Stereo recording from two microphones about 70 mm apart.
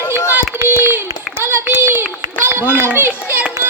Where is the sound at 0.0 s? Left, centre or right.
Left.